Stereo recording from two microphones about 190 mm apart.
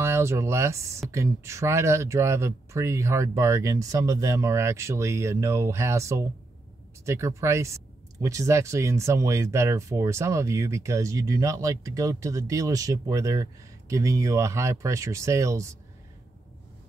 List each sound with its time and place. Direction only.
0.0 s speech: 15° right (ahead or behind)